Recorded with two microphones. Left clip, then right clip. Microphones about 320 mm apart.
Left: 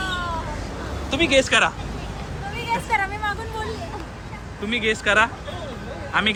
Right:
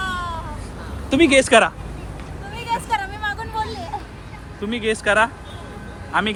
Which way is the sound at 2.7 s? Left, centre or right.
Centre.